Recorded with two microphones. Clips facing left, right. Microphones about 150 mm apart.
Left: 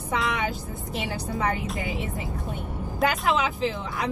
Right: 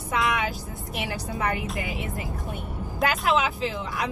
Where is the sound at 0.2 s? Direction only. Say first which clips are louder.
Right 5 dB; 75° right (ahead or behind).